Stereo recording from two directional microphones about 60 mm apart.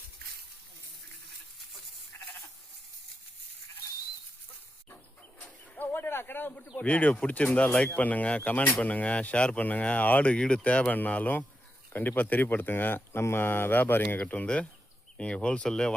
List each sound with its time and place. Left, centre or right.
2.1 s sheep: left
5.4 s a sound: left
6.7 s speech: left
10.3 s speech: centre; by 14.2 s left
14.2 s speech: left